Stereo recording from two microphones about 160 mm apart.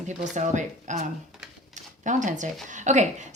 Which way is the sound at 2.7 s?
50° right (ahead or behind).